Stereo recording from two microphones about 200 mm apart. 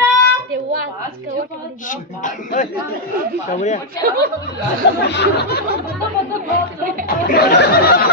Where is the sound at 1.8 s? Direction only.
40° left (ahead or behind).